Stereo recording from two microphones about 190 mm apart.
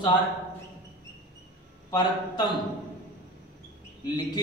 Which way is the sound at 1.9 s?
20° left (ahead or behind).